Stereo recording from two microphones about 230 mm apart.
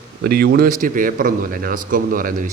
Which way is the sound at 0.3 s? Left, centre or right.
Right.